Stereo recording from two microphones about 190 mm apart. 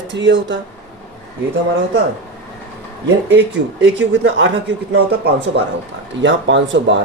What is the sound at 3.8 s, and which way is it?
Speech, 75° right (ahead or behind).